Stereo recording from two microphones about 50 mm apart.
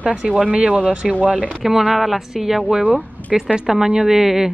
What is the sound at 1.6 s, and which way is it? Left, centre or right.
Speech, centre.